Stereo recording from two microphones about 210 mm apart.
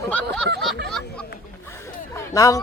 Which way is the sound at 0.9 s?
5° left (ahead or behind).